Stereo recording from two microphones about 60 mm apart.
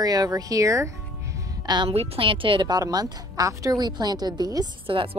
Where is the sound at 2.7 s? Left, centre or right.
Right.